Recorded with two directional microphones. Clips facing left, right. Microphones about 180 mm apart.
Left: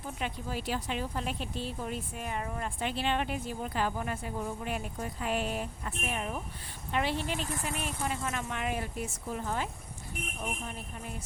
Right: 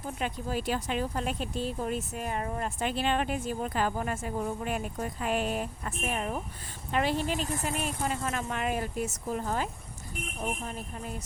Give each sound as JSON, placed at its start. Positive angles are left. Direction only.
{"t": 0.2, "sound": "speech", "side_deg": -45}